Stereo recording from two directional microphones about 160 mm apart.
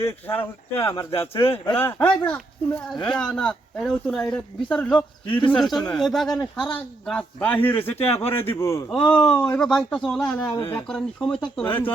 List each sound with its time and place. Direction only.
0.0 s speech: 10° left (ahead or behind)
1.4 s speech: 30° left (ahead or behind)
1.7 s speech: 10° left (ahead or behind)
4.9 s speech: 30° left (ahead or behind)
5.5 s speech: centre (ahead or behind)
10.5 s speech: 30° left (ahead or behind)
10.8 s speech: 5° left (ahead or behind)